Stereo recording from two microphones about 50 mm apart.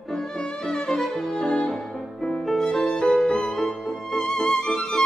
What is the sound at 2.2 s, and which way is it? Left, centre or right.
Music, centre.